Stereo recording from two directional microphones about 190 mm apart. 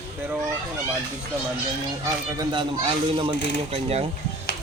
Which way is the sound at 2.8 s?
30° right (ahead or behind).